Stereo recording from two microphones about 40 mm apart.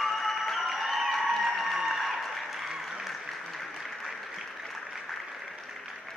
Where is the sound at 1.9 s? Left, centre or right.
Centre.